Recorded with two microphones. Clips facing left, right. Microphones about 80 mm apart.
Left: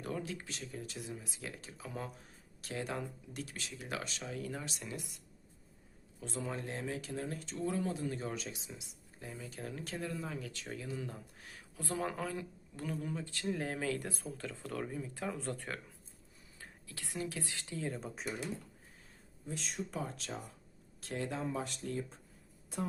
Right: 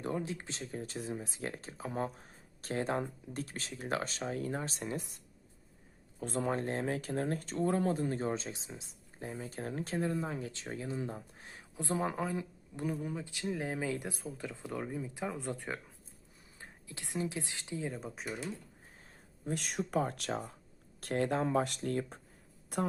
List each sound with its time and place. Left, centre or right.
0.0 s speech: right; by 18.3 s centre
19.5 s speech: right